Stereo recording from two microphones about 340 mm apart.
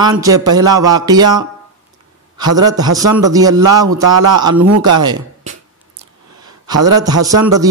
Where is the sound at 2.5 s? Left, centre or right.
Centre.